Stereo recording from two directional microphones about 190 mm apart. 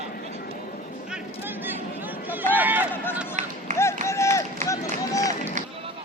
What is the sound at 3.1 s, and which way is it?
Run, 5° right (ahead or behind).